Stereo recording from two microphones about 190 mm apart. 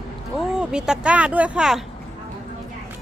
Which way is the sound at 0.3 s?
5° right (ahead or behind).